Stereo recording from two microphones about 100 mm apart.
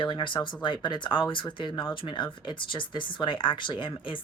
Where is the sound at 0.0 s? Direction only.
50° left (ahead or behind).